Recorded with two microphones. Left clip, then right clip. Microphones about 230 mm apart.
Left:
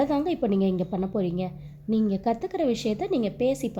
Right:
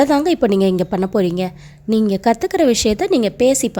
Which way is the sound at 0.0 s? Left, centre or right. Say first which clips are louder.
Right 11 dB; right.